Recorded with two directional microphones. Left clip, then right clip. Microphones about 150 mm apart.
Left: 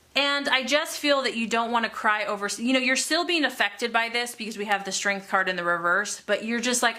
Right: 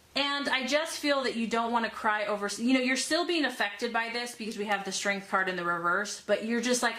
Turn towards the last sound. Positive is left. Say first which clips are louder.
# left 4 dB
turn(degrees=25)  # may be behind; listen again after turning